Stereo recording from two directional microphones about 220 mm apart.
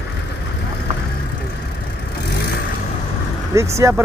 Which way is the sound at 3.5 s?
15° right (ahead or behind).